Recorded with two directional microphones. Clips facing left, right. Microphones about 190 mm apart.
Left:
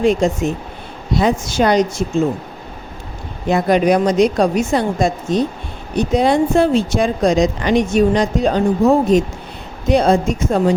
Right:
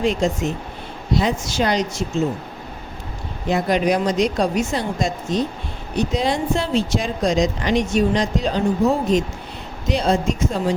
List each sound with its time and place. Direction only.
0.0 s speech: 50° left (ahead or behind)
3.5 s a woman's voice: 55° left (ahead or behind)